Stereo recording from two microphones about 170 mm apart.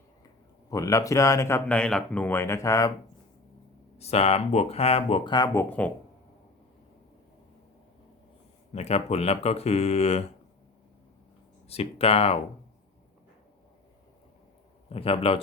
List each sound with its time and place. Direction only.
0.7 s speech: 20° left (ahead or behind)
3.9 s speech: 40° left (ahead or behind)
8.7 s speech: 40° left (ahead or behind)
11.7 s speech: 35° left (ahead or behind)
14.8 s speech: 35° left (ahead or behind)